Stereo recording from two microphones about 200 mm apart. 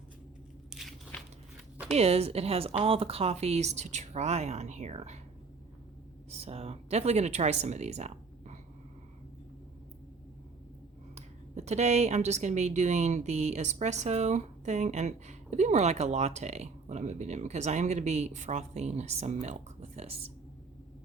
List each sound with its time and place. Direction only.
0.7 s biting: centre (ahead or behind)
1.9 s speech: 30° right (ahead or behind)
6.3 s speech: 30° right (ahead or behind)
11.1 s speech: 35° right (ahead or behind)